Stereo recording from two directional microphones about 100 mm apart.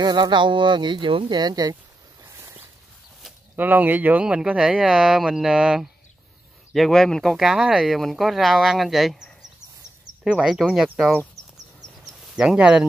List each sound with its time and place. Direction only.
0.0 s speech: 45° right (ahead or behind)
1.4 s speech: 40° right (ahead or behind)
3.5 s speech: 20° right (ahead or behind)
6.7 s speech: 5° left (ahead or behind)
12.4 s speech: 10° right (ahead or behind)